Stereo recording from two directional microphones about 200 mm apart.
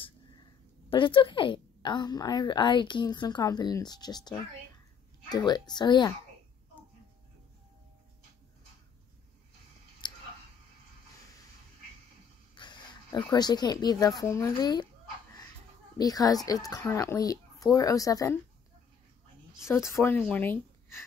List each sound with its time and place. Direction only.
0.8 s a woman's voice: 25° left (ahead or behind)
10.0 s clicking: 20° left (ahead or behind)
12.5 s a woman's voice: 20° left (ahead or behind)
16.0 s speech: 20° left (ahead or behind)
19.7 s speech: 15° left (ahead or behind)